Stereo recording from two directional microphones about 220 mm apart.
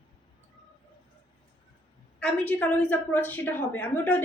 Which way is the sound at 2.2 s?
5° left (ahead or behind).